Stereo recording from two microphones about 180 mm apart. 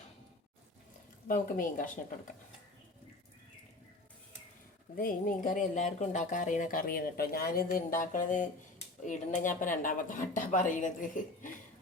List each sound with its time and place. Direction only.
1.3 s speech: 50° left (ahead or behind)
4.9 s speech: 50° left (ahead or behind)